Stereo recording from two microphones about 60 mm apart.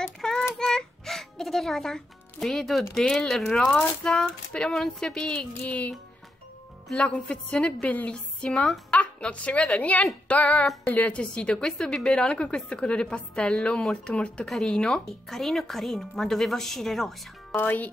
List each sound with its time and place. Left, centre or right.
0.0 s child singing: centre
0.6 s a child's voice: centre
5.2 s a sound: centre
7.1 s a woman's voice: centre
9.8 s a sound: left
10.2 s female singing: left
10.9 s a woman's voice: left
15.2 s a woman's voice: centre
17.6 s a sound: left